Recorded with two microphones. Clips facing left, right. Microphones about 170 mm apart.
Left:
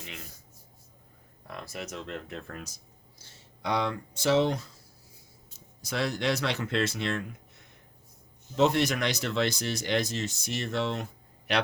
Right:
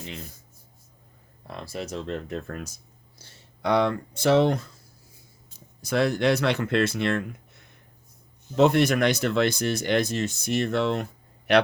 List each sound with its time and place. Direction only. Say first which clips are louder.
0.0 s speech: right 6 dB; 30° right (ahead or behind)
1.5 s speech: right 5 dB; 30° right (ahead or behind)
3.2 s speech: right 6 dB; 60° right (ahead or behind)
8.5 s speech: right 5 dB; 55° right (ahead or behind)